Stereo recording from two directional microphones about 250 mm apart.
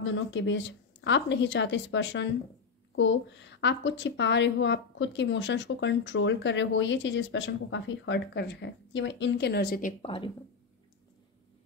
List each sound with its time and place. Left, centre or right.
0.0 s a woman's voice: left